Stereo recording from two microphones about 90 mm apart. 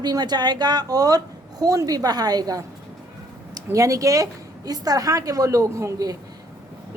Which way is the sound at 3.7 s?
35° right (ahead or behind).